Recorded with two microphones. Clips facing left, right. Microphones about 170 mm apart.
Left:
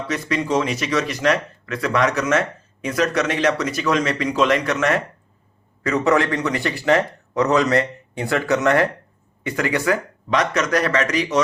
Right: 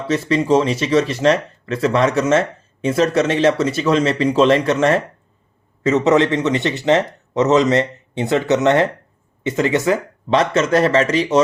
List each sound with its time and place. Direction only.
0.1 s speech: 30° right (ahead or behind)